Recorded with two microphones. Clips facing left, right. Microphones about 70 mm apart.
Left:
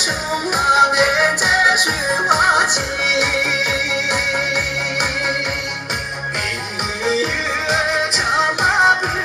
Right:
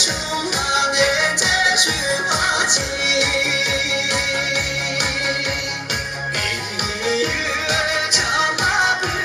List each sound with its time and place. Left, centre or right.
0.5 s music: left
7.0 s music: left